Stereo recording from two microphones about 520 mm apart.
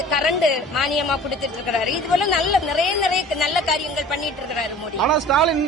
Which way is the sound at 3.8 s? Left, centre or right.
Left.